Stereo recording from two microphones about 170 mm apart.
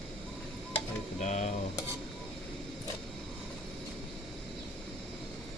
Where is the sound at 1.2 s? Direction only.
40° left (ahead or behind).